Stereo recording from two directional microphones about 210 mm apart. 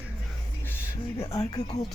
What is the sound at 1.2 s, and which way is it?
Speech, 15° left (ahead or behind).